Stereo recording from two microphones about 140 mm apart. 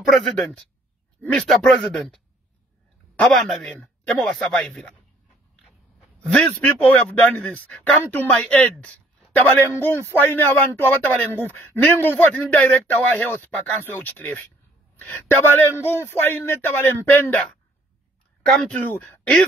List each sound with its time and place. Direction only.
0.1 s speech: 5° left (ahead or behind)
6.3 s a woman's voice: 10° left (ahead or behind)
18.4 s speech: 5° left (ahead or behind)